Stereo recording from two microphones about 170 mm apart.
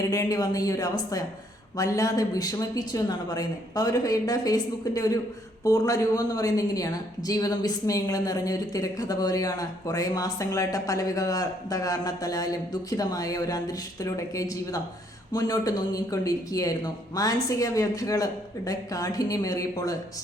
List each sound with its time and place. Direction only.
0.1 s a woman's voice: 20° left (ahead or behind)